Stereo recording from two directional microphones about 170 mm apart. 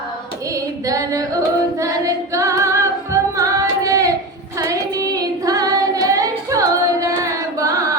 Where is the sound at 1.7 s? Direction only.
20° right (ahead or behind).